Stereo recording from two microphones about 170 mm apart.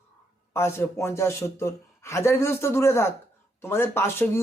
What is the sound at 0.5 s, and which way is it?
Speech, 15° left (ahead or behind).